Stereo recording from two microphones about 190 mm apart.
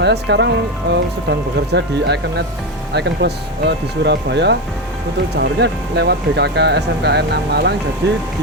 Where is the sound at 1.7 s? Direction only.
60° right (ahead or behind).